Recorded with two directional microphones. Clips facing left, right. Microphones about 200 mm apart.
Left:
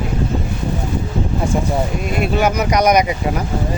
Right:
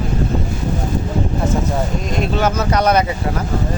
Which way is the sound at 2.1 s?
10° left (ahead or behind).